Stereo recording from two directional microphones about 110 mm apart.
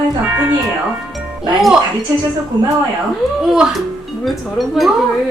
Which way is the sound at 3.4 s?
5° right (ahead or behind).